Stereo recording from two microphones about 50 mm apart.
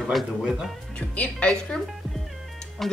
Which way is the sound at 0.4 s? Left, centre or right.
Centre.